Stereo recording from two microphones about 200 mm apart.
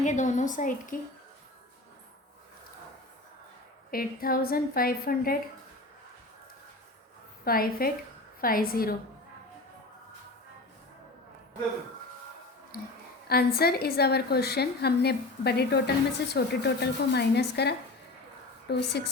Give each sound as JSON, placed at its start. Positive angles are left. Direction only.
{"t": 0.0, "sound": "a woman's voice", "side_deg": 35}
{"t": 3.9, "sound": "a woman's voice", "side_deg": 45}
{"t": 7.4, "sound": "a woman's voice", "side_deg": 45}
{"t": 13.2, "sound": "a woman's voice", "side_deg": 50}